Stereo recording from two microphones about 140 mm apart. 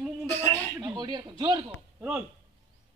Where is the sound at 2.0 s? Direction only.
15° right (ahead or behind).